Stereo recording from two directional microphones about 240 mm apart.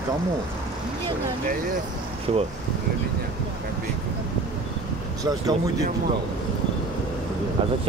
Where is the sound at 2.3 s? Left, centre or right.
Right.